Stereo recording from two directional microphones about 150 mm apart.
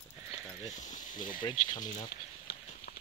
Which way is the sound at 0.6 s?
55° left (ahead or behind).